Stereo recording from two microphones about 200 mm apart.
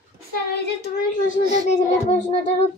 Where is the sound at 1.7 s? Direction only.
35° left (ahead or behind).